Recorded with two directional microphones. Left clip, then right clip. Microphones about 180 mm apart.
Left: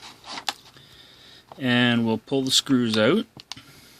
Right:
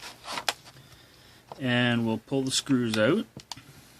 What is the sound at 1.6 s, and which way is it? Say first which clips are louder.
Speech: left 5 dB; 45° left (ahead or behind).